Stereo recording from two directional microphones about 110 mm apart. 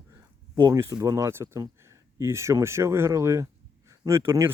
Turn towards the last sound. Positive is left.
turn(degrees=-25)  # may be behind; listen again after turning